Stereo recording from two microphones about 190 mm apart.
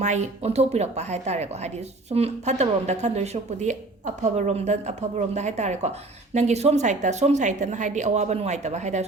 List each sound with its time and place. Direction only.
0.0 s speech: 35° right (ahead or behind)